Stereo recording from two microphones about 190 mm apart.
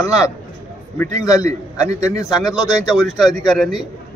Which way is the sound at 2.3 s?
Centre (ahead or behind).